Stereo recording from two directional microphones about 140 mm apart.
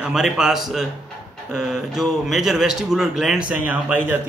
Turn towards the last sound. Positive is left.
turn(degrees=-10)  # may be behind; listen again after turning